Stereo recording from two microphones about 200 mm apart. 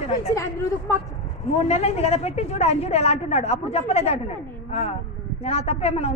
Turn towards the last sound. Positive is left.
turn(degrees=30)  # may be behind; listen again after turning